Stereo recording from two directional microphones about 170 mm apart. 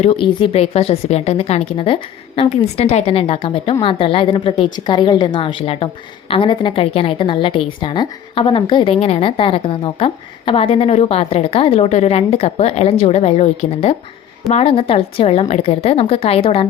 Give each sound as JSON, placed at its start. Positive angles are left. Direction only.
{"t": 0.0, "sound": "a woman's voice", "side_deg": 35}